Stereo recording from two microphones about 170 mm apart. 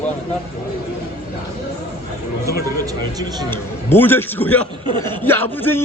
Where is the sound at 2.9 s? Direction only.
20° right (ahead or behind).